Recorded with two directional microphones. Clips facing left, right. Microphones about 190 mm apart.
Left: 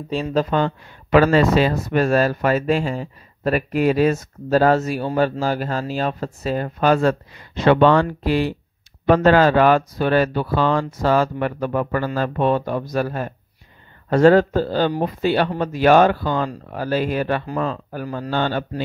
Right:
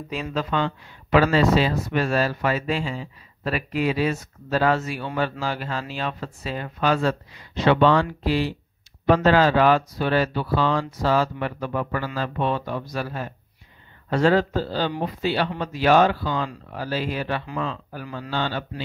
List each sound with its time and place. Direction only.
0.1 s speech: 35° left (ahead or behind)